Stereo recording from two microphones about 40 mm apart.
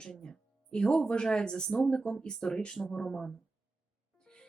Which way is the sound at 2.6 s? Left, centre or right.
Left.